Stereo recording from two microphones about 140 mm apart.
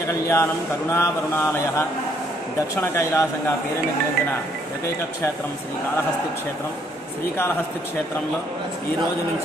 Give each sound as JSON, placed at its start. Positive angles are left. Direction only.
{"t": 0.3, "sound": "speech", "side_deg": 20}